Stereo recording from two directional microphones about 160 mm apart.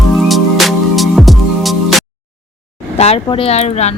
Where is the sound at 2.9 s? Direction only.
40° left (ahead or behind).